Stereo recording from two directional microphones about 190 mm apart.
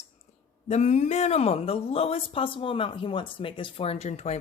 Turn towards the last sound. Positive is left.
turn(degrees=35)  # may be behind; listen again after turning